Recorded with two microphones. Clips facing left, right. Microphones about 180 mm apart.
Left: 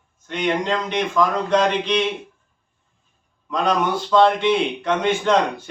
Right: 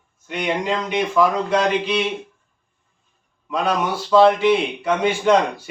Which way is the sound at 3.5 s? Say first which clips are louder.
Left 1 dB; 5° right (ahead or behind).